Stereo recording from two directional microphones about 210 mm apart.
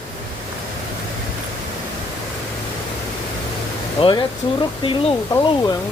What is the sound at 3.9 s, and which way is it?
Speech, 25° left (ahead or behind).